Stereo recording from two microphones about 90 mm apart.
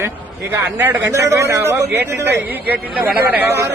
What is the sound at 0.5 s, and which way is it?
Speech, 20° right (ahead or behind).